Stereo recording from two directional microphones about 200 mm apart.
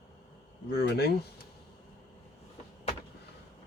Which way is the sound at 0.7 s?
55° left (ahead or behind).